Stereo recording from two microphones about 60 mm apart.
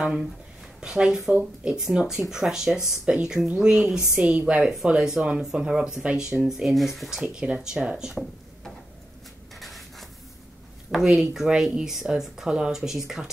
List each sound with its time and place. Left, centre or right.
0.0 s speech: centre
9.6 s a sound: centre
10.9 s speech: centre